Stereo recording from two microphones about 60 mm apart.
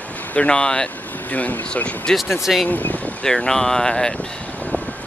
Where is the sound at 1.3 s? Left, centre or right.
Left.